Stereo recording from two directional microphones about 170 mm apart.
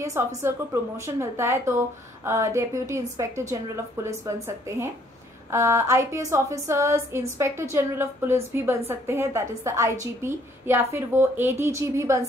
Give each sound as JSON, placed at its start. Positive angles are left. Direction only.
{"t": 0.0, "sound": "a woman's voice", "side_deg": -15}
{"t": 5.5, "sound": "a woman's voice", "side_deg": -15}